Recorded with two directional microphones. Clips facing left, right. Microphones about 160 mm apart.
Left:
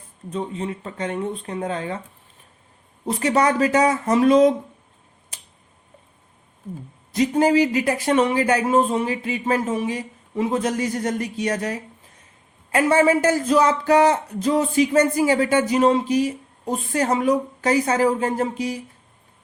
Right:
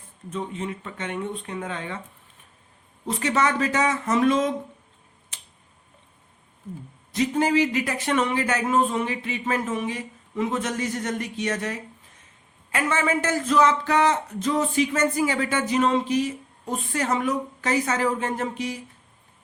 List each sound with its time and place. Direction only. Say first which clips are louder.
0.3 s speech: left 3 dB; 35° left (ahead or behind)
3.1 s speech: left 4 dB; 35° left (ahead or behind)
7.1 s speech: left 4 dB; 35° left (ahead or behind)